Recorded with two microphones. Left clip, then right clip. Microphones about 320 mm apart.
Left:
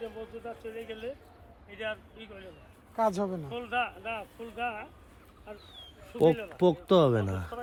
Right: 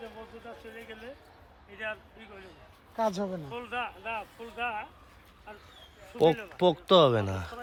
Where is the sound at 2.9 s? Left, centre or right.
Left.